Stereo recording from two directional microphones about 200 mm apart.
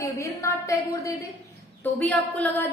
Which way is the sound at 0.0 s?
15° left (ahead or behind).